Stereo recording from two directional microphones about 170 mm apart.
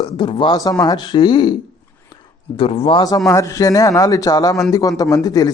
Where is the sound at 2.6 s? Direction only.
35° left (ahead or behind).